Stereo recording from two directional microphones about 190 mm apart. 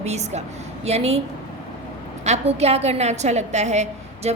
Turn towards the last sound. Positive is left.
turn(degrees=-35)  # may be behind; listen again after turning